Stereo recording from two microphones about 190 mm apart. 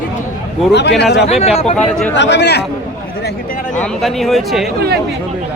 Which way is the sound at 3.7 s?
5° left (ahead or behind).